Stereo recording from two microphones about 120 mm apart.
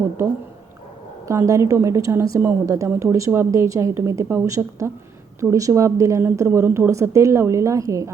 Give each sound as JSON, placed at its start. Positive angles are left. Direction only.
{"t": 1.3, "sound": "a woman's voice", "side_deg": -25}